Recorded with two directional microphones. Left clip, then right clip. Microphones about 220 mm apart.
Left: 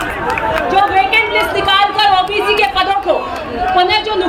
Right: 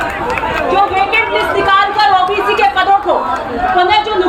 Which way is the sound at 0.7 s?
50° left (ahead or behind).